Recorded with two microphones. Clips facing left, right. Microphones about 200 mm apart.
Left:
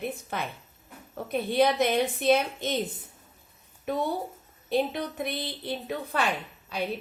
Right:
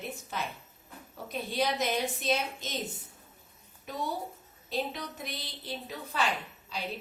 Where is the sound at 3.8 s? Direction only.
60° left (ahead or behind).